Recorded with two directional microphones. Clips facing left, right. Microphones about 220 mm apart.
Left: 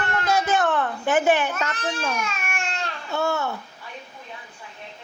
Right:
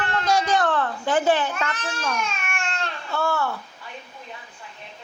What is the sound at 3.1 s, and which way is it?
Babbling, 20° left (ahead or behind).